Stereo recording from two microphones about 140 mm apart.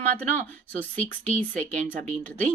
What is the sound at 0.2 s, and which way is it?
Speech, 10° left (ahead or behind).